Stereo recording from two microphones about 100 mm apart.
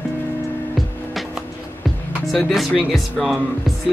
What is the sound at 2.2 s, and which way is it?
Speech, centre (ahead or behind).